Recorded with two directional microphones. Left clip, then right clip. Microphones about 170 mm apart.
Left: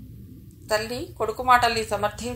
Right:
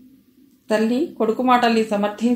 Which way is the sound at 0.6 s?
35° left (ahead or behind).